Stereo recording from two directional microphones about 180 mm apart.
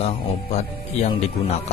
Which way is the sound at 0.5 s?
35° left (ahead or behind).